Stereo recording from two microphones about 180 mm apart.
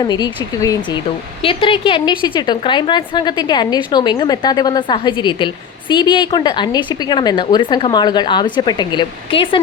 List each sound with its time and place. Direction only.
0.0 s a woman's voice: 25° left (ahead or behind)